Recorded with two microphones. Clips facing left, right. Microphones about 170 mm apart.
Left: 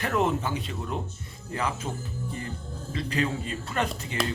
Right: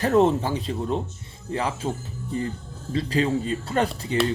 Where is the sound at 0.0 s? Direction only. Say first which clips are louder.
Right 7 dB; 30° right (ahead or behind).